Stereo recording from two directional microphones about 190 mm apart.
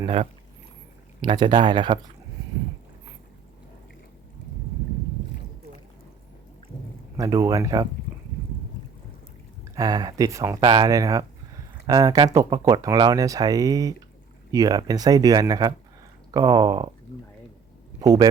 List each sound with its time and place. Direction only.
0.0 s speech: 30° right (ahead or behind)
7.2 s speech: 20° right (ahead or behind)
9.7 s speech: 20° right (ahead or behind)
18.0 s speech: 15° right (ahead or behind)